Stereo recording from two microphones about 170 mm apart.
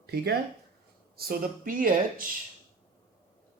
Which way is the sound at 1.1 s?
60° right (ahead or behind).